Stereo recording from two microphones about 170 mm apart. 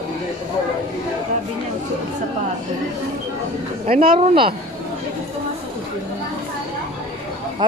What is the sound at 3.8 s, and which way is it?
Speech, 55° right (ahead or behind).